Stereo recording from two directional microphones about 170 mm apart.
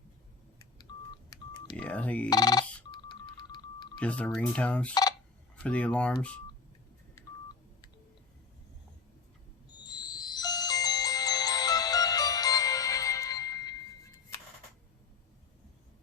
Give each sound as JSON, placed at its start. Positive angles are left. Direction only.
{"t": 0.9, "sound": "telephone dialing", "side_deg": 25}
{"t": 1.7, "sound": "speech", "side_deg": 10}
{"t": 2.3, "sound": "speech", "side_deg": 25}
{"t": 2.9, "sound": "music", "side_deg": 25}
{"t": 4.0, "sound": "speech", "side_deg": 10}
{"t": 9.7, "sound": "music", "side_deg": 25}